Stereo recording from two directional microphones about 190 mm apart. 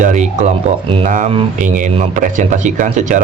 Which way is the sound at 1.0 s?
40° right (ahead or behind).